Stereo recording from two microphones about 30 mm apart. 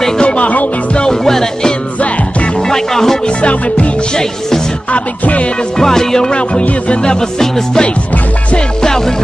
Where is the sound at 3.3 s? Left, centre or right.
Left.